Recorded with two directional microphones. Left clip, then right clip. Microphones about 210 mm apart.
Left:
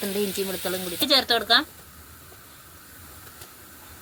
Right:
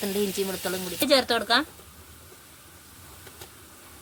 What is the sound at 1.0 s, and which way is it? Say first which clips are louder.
Speech: left 1 dB; 25° right (ahead or behind).